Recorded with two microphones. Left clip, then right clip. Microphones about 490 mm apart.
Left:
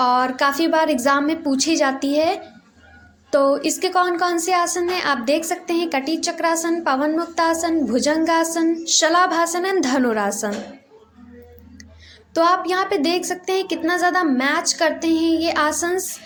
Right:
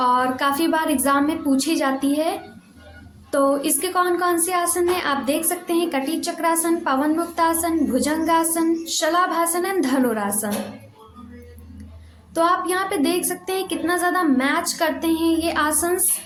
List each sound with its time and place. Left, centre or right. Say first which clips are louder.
0.0 s a woman's voice: left 2 dB; right
12.3 s a woman's voice: left 2 dB; right